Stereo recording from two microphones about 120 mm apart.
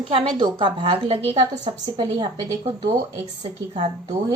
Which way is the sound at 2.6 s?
55° right (ahead or behind).